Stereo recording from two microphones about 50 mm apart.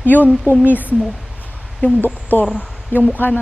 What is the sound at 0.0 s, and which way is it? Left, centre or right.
Speech, left.